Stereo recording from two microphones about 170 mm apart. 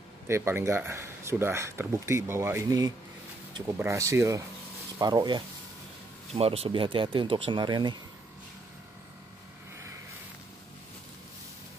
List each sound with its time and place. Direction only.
0.3 s speech: 15° right (ahead or behind)
6.3 s speech: 35° right (ahead or behind)